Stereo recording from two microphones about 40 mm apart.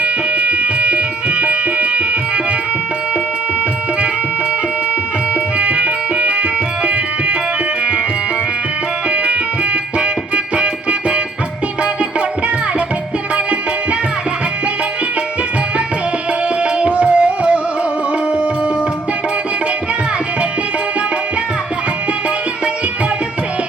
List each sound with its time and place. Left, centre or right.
0.0 s music: right
5.3 s music: right
9.0 s music: right
16.7 s music: right